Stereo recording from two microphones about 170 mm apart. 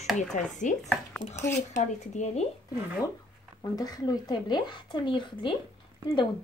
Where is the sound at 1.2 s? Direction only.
25° right (ahead or behind).